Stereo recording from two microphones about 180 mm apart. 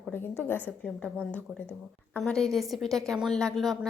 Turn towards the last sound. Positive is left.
turn(degrees=0)  # may be behind; listen again after turning